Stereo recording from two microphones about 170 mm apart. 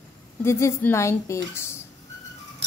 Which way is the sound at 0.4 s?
15° left (ahead or behind).